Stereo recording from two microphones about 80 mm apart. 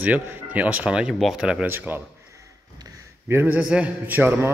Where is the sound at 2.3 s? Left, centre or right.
Right.